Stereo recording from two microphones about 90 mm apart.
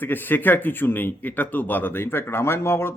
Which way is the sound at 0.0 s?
20° left (ahead or behind).